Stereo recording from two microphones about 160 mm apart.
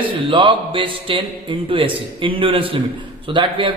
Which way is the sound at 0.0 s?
30° right (ahead or behind).